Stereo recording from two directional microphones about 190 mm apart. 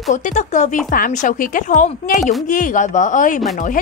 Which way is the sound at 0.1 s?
40° left (ahead or behind).